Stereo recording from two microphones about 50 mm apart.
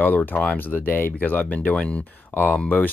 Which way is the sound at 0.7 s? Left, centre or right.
Left.